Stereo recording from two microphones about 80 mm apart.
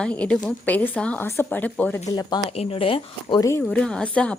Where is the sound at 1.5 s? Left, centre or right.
Centre.